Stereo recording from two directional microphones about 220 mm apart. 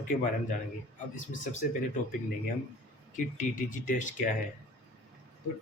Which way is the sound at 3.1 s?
35° left (ahead or behind).